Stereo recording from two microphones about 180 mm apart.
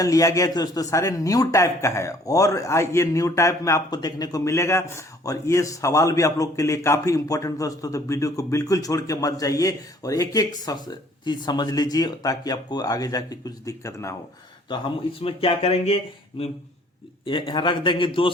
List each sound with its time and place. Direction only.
0.0 s a man's voice: 20° left (ahead or behind); by 16.0 s 35° left (ahead or behind)
17.2 s a man's voice: 30° left (ahead or behind)